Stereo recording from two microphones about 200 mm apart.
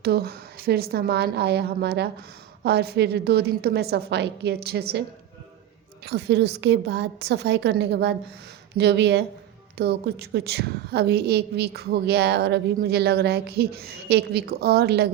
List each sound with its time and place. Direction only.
0.0 s a woman's voice: 50° right (ahead or behind)
6.1 s a woman's voice: 55° right (ahead or behind)